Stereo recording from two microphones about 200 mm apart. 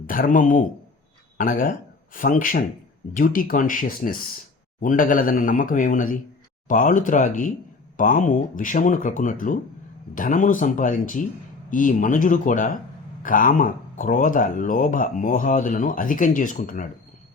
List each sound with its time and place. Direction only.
0.1 s speech: 45° left (ahead or behind)